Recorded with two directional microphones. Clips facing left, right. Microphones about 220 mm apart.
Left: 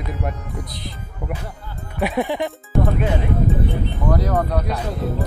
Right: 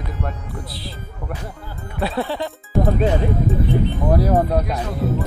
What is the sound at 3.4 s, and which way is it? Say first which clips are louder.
Speech: right 3 dB; centre (ahead or behind).